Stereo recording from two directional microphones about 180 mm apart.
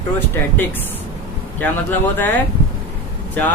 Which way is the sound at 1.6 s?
10° left (ahead or behind).